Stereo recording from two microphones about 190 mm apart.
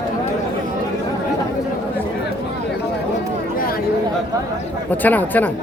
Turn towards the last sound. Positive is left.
turn(degrees=10)  # may be behind; listen again after turning